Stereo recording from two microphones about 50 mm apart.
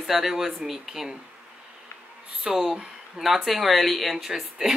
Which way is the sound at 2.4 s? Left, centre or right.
Centre.